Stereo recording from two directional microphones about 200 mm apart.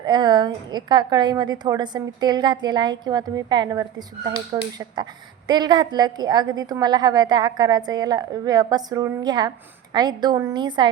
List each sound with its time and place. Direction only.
0.0 s a woman's voice: 20° right (ahead or behind)